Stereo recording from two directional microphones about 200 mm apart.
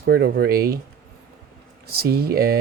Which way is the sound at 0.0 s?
50° right (ahead or behind).